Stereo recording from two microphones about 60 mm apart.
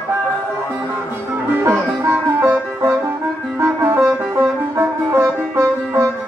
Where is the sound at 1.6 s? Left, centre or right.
Right.